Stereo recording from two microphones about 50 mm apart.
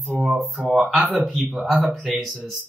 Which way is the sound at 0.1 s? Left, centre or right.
Centre.